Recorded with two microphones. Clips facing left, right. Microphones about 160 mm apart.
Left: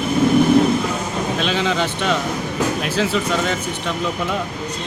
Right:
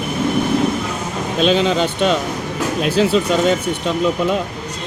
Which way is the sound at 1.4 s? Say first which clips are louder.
Right 8 dB; 25° right (ahead or behind).